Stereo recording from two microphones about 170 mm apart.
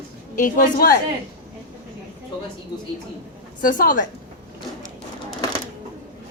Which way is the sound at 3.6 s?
55° left (ahead or behind).